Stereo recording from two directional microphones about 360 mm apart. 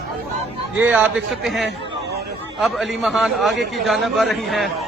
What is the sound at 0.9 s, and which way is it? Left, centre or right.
A man's voice, centre.